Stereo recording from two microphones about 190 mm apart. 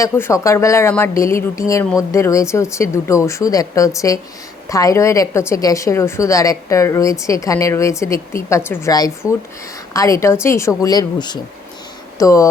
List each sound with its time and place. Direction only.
0.0 s a woman's voice: 15° left (ahead or behind)